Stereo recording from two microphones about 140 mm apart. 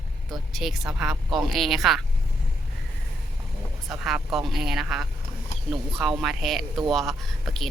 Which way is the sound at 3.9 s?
Centre (ahead or behind).